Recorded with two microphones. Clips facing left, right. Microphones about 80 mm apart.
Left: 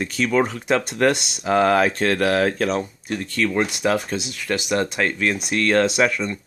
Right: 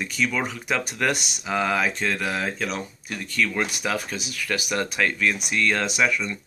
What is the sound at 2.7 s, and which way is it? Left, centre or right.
Speech, left.